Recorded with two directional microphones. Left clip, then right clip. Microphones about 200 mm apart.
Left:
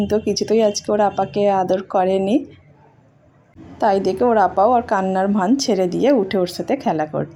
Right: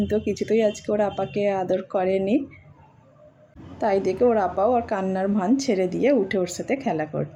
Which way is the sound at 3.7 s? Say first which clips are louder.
Left 5 dB; 15° left (ahead or behind).